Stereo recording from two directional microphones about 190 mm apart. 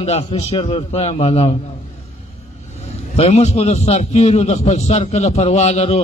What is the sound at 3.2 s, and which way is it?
A man's voice, 35° left (ahead or behind).